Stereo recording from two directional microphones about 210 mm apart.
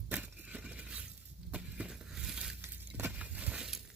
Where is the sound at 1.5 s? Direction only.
5° right (ahead or behind).